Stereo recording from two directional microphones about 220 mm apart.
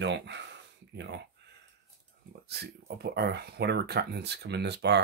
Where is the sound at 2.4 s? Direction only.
45° right (ahead or behind).